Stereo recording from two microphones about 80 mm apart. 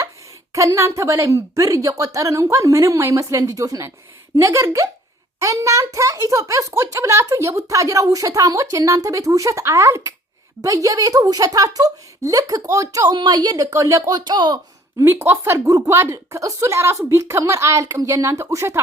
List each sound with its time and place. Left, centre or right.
0.5 s a woman's voice: right
13.1 s a child's voice: right
14.3 s speech: right
15.0 s speech: right
15.5 s a woman's voice: right